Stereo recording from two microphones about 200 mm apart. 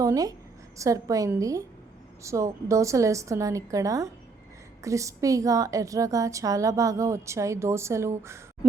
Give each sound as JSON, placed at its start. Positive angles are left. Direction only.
{"t": 0.0, "sound": "a woman's voice", "side_deg": -15}